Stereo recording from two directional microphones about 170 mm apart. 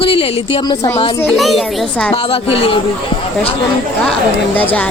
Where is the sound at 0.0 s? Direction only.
35° left (ahead or behind).